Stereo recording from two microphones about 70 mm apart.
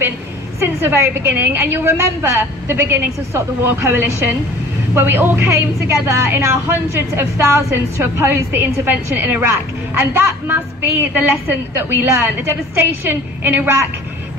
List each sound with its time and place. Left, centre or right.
0.6 s a woman's voice: right
5.4 s a woman's voice: right